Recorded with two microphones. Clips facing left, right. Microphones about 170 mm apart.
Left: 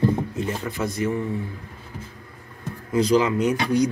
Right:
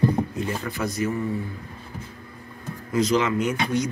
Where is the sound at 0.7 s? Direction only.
25° left (ahead or behind).